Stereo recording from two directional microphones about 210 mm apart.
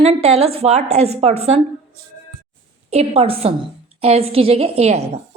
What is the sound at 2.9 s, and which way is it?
A woman's voice, 30° right (ahead or behind).